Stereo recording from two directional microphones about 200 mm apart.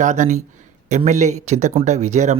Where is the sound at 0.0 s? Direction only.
35° right (ahead or behind).